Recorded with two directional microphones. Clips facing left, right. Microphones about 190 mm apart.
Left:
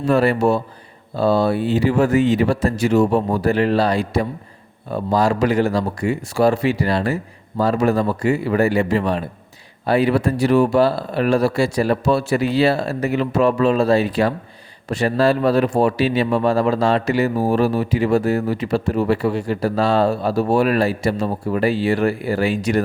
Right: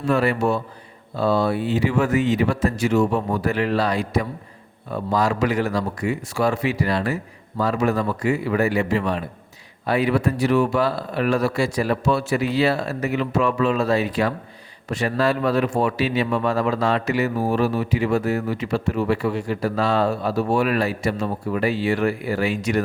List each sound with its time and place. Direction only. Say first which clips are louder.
0.1 s speech: left 4 dB; 35° left (ahead or behind)